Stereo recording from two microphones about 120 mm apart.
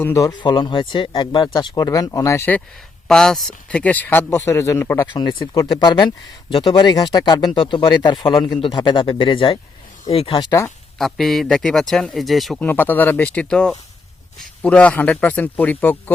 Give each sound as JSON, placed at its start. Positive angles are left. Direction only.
{"t": 0.0, "sound": "speech", "side_deg": 25}
{"t": 0.3, "sound": "speech", "side_deg": 40}
{"t": 3.1, "sound": "speech", "side_deg": 5}
{"t": 5.1, "sound": "speech", "side_deg": 35}
{"t": 10.9, "sound": "speech", "side_deg": 0}
{"t": 12.5, "sound": "speech", "side_deg": 15}